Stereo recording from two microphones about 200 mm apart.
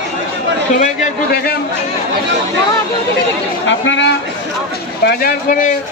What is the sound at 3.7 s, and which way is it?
Speech, 65° left (ahead or behind).